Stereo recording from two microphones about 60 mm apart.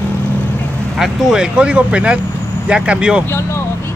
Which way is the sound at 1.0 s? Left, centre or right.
Centre.